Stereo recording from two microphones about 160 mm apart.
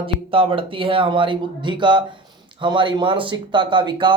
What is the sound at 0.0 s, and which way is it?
Speech, 35° right (ahead or behind).